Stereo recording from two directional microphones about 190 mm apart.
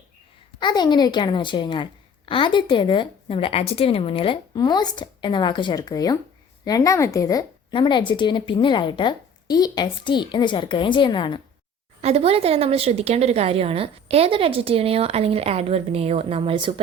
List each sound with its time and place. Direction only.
0.6 s a woman's voice: 20° left (ahead or behind)
12.0 s a woman's voice: 30° right (ahead or behind)